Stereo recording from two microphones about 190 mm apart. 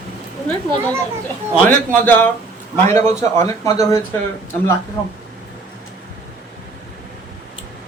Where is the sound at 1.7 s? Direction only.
10° left (ahead or behind).